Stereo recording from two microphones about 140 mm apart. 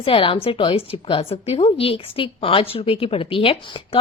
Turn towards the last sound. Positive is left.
turn(degrees=40)  # may be behind; listen again after turning